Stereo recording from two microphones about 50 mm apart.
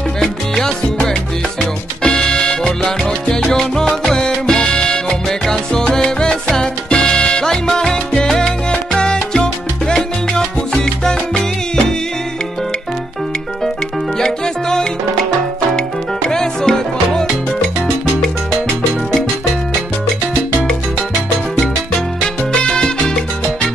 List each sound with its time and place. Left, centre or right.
0.2 s music: centre
2.0 s music: centre
5.5 s salsa music: centre
7.6 s music: centre
8.3 s salsa music: centre
14.2 s music: centre
16.3 s music: centre
22.5 s salsa music: centre